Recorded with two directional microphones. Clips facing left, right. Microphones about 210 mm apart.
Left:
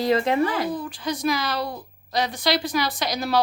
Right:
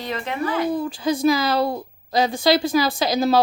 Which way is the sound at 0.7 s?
25° right (ahead or behind).